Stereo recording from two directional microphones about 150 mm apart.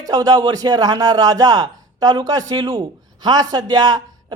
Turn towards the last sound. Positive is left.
turn(degrees=-25)  # may be behind; listen again after turning